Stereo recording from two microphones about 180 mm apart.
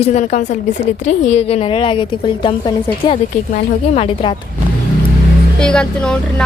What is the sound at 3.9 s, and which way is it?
Speech, 30° left (ahead or behind).